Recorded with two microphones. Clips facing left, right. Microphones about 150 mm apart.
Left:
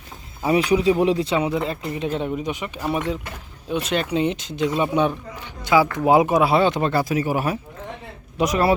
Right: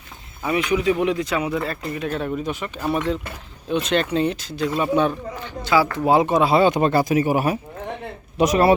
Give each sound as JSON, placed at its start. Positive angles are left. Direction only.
{"t": 0.4, "sound": "speech", "side_deg": 35}
{"t": 4.2, "sound": "speech", "side_deg": 20}
{"t": 6.6, "sound": "speech", "side_deg": -15}